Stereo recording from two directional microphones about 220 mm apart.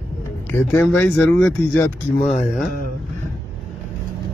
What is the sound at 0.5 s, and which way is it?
Speech, 5° left (ahead or behind).